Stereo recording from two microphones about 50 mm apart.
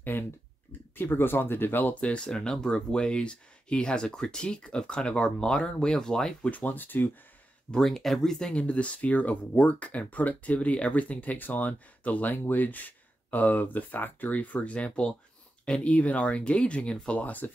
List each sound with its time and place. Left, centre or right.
0.9 s speech: left
2.0 s speech: centre
6.5 s speech: left
7.8 s speech: centre
8.6 s speech: left